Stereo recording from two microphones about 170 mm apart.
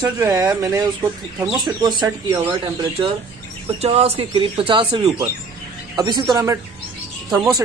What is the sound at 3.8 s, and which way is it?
A woman's voice, 35° right (ahead or behind).